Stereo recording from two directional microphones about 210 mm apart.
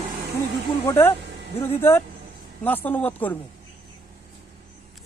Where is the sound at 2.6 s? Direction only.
10° left (ahead or behind).